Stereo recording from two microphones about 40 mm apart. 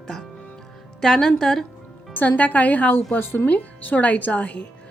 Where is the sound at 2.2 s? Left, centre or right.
Left.